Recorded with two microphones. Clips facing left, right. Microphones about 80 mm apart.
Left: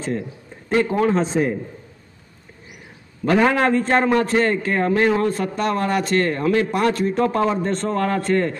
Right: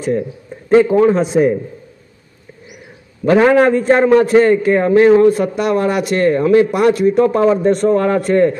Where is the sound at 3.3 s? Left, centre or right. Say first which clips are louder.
Right 7 dB; centre.